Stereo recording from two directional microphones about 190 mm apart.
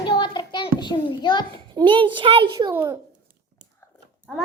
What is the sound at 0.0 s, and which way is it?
Child singing, 25° left (ahead or behind).